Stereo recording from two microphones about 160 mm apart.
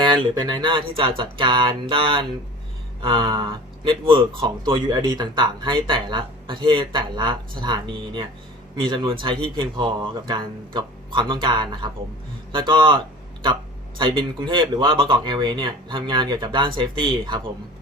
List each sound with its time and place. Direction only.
0.0 s speech: 30° right (ahead or behind)
14.0 s speech: 30° right (ahead or behind)